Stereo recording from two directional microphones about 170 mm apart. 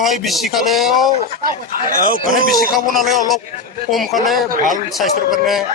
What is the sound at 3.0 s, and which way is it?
Speech, centre (ahead or behind).